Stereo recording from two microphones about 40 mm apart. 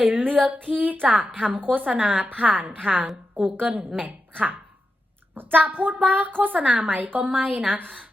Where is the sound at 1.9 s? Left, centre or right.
Right.